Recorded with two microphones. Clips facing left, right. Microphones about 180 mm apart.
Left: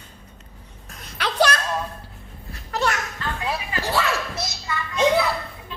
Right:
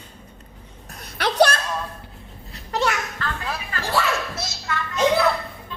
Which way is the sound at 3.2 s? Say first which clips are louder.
Left 2 dB; 15° left (ahead or behind).